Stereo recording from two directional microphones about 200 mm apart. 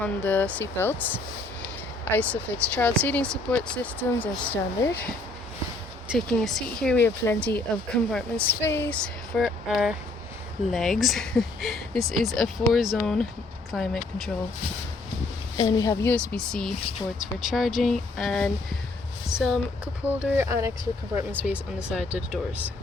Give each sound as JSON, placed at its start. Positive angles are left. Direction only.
{"t": 0.0, "sound": "speech", "side_deg": 5}
{"t": 15.5, "sound": "speech", "side_deg": 20}
{"t": 16.1, "sound": "speech", "side_deg": 5}
{"t": 20.3, "sound": "speech", "side_deg": -15}